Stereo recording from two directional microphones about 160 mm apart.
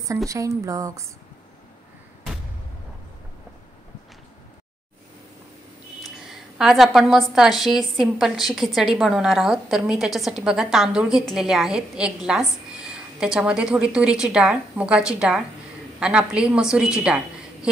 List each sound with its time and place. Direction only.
0.3 s speech: 20° right (ahead or behind)
6.0 s a woman's voice: centre (ahead or behind)